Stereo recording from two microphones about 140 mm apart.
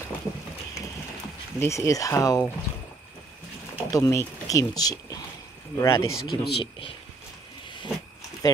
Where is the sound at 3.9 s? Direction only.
20° left (ahead or behind).